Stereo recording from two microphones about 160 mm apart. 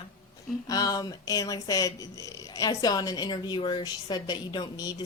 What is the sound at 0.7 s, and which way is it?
Speech, 20° left (ahead or behind).